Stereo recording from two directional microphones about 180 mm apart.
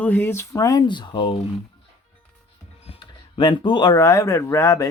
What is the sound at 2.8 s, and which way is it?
Speech, 30° left (ahead or behind).